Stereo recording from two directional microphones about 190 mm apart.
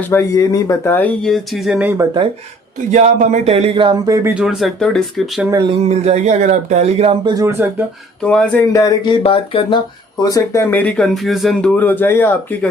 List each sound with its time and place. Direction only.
0.1 s speech: 15° left (ahead or behind); by 2.0 s 10° right (ahead or behind)
2.9 s speech: 40° right (ahead or behind); by 4.4 s 15° right (ahead or behind)
4.4 s speech: centre (ahead or behind)
5.8 s speech: 35° right (ahead or behind)
7.3 s speech: 15° right (ahead or behind)
8.2 s speech: 5° left (ahead or behind)
8.7 s speech: 20° left (ahead or behind)
9.2 s speech: 30° left (ahead or behind); by 12.5 s 10° left (ahead or behind)